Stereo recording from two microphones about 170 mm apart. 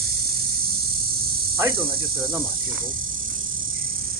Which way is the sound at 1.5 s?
15° right (ahead or behind).